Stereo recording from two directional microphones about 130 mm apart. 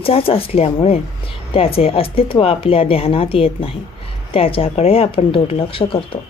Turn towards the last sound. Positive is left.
turn(degrees=45)  # may be behind; listen again after turning